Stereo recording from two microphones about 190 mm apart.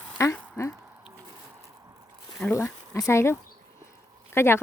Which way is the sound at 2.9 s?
15° left (ahead or behind).